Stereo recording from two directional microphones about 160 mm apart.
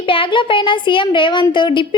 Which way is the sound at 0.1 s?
30° left (ahead or behind).